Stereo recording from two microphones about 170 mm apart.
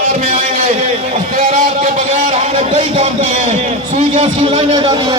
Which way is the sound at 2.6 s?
30° right (ahead or behind).